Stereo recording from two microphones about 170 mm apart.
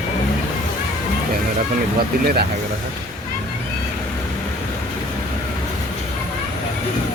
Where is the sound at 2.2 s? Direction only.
65° right (ahead or behind).